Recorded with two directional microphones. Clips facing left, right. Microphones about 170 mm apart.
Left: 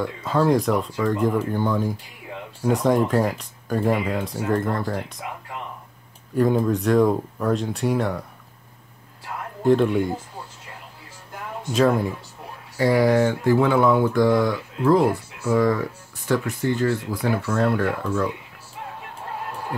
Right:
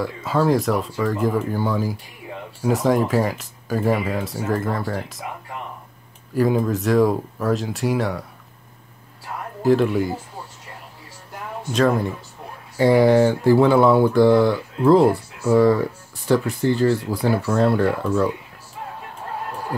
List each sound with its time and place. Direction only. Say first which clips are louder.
0.0 s speech: right 1 dB; 5° right (ahead or behind)
6.3 s speech: even; centre (ahead or behind)
9.6 s speech: right 1 dB; centre (ahead or behind)
11.7 s speech: even; centre (ahead or behind)
12.7 s speech: right 4 dB; 25° right (ahead or behind)